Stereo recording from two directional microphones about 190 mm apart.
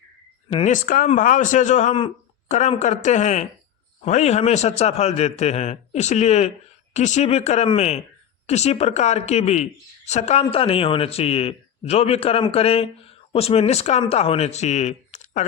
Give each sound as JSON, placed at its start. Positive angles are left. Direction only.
{"t": 0.5, "sound": "a man's voice", "side_deg": 40}